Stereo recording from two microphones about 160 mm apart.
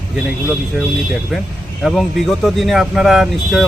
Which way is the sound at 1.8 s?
Centre (ahead or behind).